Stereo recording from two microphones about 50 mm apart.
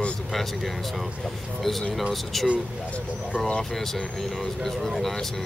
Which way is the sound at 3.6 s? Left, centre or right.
Centre.